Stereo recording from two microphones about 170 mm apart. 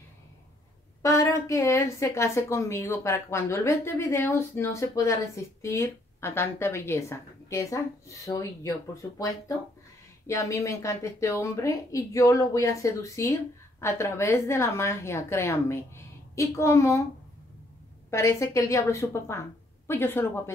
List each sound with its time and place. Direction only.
1.0 s a woman's voice: 20° left (ahead or behind)
10.2 s a woman's voice: 20° left (ahead or behind)
18.1 s a woman's voice: 15° left (ahead or behind)